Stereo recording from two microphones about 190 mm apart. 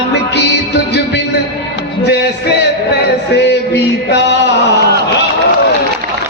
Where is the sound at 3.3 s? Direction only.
60° left (ahead or behind).